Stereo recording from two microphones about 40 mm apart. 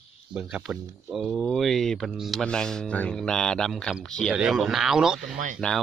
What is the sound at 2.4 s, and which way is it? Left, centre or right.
Speech, centre.